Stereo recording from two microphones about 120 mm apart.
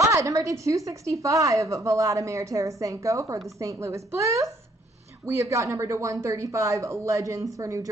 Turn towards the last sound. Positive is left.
turn(degrees=-25)  # may be behind; listen again after turning